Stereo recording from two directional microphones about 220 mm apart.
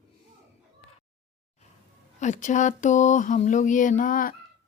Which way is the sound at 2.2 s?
35° left (ahead or behind).